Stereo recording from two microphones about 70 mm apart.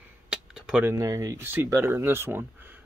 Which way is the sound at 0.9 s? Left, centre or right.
Right.